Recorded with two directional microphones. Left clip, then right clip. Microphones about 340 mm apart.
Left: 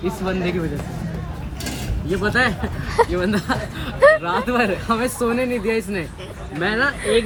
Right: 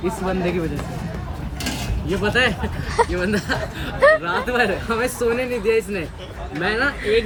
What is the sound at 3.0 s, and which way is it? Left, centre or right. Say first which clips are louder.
Speech: left 1 dB; centre.